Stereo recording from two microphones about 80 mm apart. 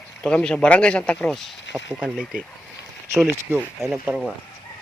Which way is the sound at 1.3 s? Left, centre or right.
Centre.